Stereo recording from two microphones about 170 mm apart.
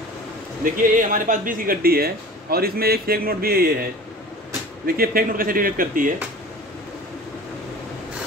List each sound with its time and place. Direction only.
0.7 s speech: 50° right (ahead or behind)
4.8 s speech: 60° right (ahead or behind)